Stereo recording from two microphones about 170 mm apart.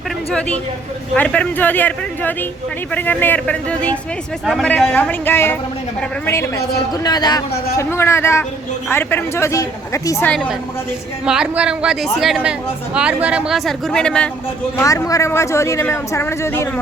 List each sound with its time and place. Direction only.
0.3 s a man's voice: 5° left (ahead or behind)
11.3 s a woman's voice: 5° right (ahead or behind)
14.8 s speech: 20° left (ahead or behind)